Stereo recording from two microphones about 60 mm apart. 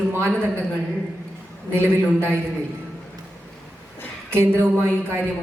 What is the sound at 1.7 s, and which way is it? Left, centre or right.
Speech, right.